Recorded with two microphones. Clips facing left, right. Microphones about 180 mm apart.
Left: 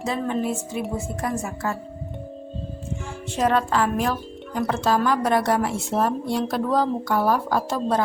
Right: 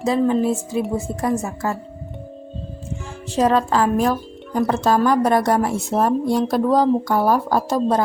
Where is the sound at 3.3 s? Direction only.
35° right (ahead or behind).